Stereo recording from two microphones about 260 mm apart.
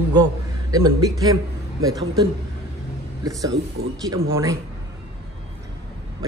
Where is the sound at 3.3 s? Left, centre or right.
Centre.